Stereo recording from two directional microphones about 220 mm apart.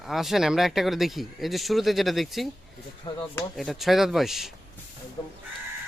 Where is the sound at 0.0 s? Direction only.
Centre (ahead or behind).